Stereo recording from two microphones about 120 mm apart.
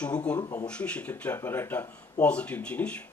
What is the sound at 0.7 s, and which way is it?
Speech, 10° left (ahead or behind).